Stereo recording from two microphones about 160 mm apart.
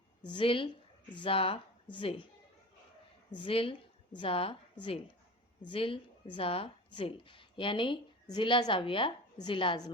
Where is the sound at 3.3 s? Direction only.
35° left (ahead or behind).